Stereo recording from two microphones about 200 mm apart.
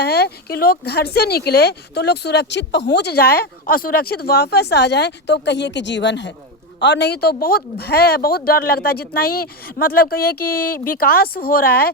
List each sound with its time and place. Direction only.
0.0 s a woman's voice: 55° left (ahead or behind)